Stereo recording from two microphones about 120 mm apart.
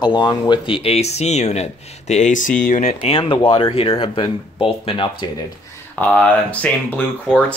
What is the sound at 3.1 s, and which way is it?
Speech, 50° left (ahead or behind).